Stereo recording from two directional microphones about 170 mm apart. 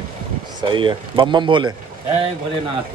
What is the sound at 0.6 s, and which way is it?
Speech, 30° right (ahead or behind).